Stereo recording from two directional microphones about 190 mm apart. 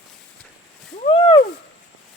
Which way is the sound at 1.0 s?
25° left (ahead or behind).